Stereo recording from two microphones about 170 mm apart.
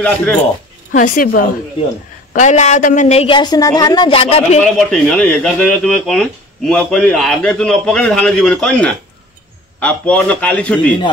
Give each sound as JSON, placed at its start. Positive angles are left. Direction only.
{"t": 0.0, "sound": "a man's voice", "side_deg": 10}
{"t": 0.9, "sound": "a woman's voice", "side_deg": 55}
{"t": 2.3, "sound": "speech", "side_deg": 45}
{"t": 4.7, "sound": "a man's voice", "side_deg": 5}